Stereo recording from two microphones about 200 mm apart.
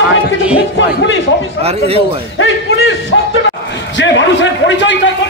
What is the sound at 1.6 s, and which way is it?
Speech, 30° right (ahead or behind).